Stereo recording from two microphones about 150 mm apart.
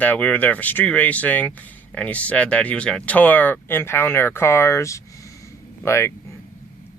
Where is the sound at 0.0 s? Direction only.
10° left (ahead or behind).